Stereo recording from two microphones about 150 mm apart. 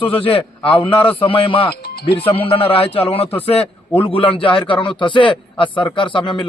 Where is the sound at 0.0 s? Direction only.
35° left (ahead or behind).